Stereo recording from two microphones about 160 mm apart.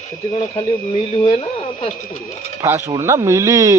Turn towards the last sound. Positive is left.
turn(degrees=-20)  # may be behind; listen again after turning